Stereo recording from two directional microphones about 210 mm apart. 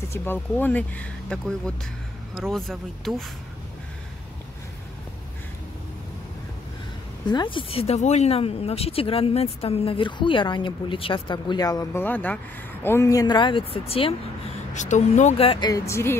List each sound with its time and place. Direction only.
0.1 s speech: 10° left (ahead or behind)
7.2 s speech: 20° left (ahead or behind)